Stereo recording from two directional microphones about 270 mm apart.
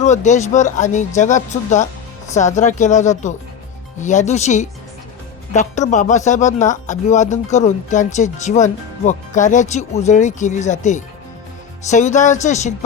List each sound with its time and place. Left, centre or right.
0.0 s speech: left